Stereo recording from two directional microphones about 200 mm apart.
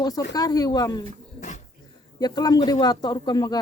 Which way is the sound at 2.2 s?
20° left (ahead or behind).